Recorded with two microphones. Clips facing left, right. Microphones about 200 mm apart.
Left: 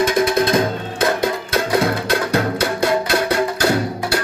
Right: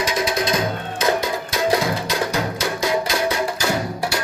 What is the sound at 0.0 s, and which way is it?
Music, 55° left (ahead or behind).